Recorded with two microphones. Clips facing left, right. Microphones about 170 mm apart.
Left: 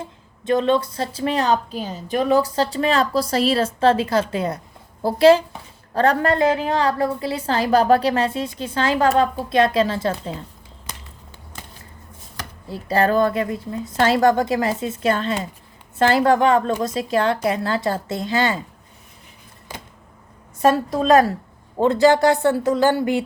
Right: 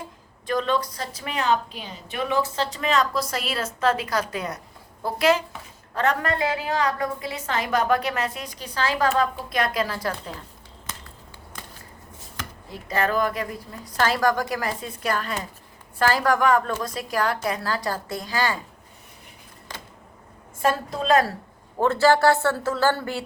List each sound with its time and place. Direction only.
0.0 s a woman's voice: 25° left (ahead or behind)
12.4 s a woman's voice: 30° left (ahead or behind)
20.6 s a woman's voice: 20° left (ahead or behind)